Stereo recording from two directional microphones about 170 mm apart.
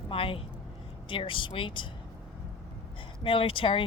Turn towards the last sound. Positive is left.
turn(degrees=30)  # may be behind; listen again after turning